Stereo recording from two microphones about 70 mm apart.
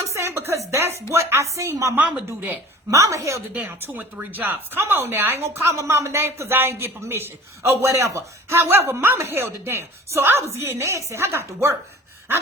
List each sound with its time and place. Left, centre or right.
0.0 s speech: right
2.0 s speech: right
2.9 s speech: right
3.5 s speech: centre; by 11.8 s right